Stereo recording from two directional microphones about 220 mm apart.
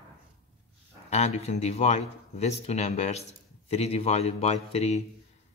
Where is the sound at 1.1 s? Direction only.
30° left (ahead or behind).